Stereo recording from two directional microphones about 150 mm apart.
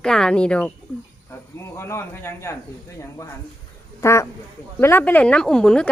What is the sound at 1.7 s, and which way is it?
Speech, 20° left (ahead or behind).